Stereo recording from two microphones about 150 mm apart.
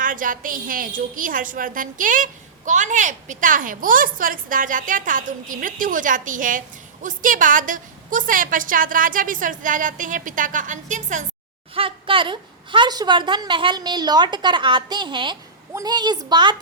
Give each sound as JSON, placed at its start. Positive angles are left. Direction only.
{"t": 0.0, "sound": "a woman's voice", "side_deg": -65}
{"t": 11.7, "sound": "a woman's voice", "side_deg": -35}